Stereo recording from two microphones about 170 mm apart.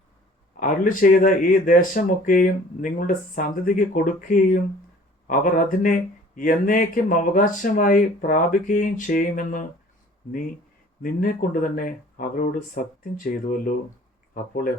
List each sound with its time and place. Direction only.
0.6 s speech: 55° left (ahead or behind)
11.0 s speech: 55° left (ahead or behind)